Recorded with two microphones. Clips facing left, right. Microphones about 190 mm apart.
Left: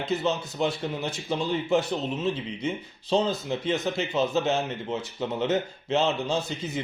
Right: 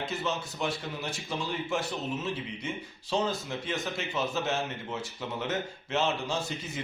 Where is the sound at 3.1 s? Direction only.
30° left (ahead or behind).